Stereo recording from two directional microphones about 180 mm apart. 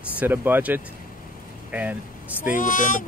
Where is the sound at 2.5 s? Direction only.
45° left (ahead or behind).